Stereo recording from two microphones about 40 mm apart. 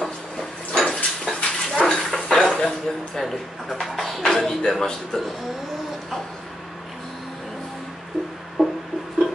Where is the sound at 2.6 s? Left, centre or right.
Centre.